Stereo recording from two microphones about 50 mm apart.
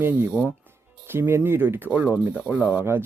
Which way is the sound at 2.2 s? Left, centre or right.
Right.